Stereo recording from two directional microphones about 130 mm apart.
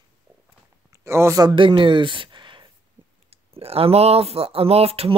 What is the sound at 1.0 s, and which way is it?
Speech, 20° right (ahead or behind).